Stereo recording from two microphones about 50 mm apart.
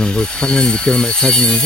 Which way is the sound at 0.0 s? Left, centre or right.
Centre.